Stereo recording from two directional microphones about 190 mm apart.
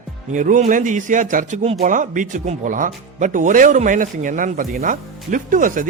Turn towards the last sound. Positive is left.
turn(degrees=-45)  # may be behind; listen again after turning